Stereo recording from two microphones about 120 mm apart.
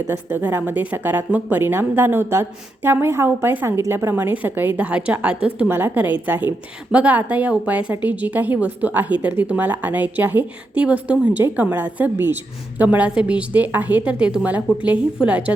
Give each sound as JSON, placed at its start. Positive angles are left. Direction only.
{"t": 0.1, "sound": "speech", "side_deg": -20}